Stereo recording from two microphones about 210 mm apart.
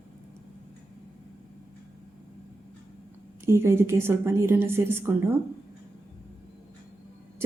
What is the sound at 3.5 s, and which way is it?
A woman's voice, 10° right (ahead or behind).